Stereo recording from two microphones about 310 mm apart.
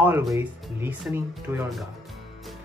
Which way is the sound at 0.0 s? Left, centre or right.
Centre.